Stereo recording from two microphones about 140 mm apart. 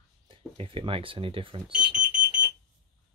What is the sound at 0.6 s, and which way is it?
Speech, 40° right (ahead or behind).